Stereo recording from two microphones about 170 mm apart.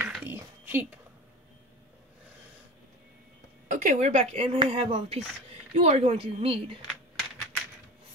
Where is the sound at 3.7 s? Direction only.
45° right (ahead or behind).